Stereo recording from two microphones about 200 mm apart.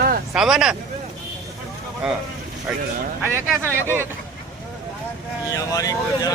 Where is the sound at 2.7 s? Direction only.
5° right (ahead or behind).